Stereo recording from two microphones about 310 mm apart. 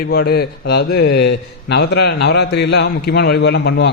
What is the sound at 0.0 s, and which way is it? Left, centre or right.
A man's voice, left.